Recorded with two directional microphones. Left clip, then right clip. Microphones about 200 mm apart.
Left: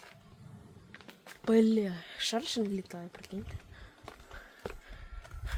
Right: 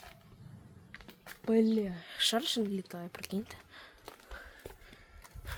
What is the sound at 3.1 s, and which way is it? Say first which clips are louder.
Speech: right 4 dB; 30° right (ahead or behind).